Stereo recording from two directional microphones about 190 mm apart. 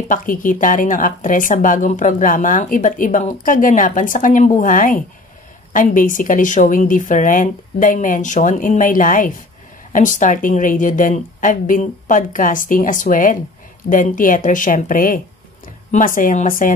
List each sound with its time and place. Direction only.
0.1 s speech: 45° left (ahead or behind)